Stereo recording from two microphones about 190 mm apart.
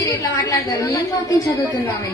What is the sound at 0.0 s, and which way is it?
A woman's voice, 20° left (ahead or behind).